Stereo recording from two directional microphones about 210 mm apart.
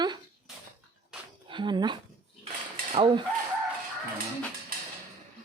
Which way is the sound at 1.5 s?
20° right (ahead or behind).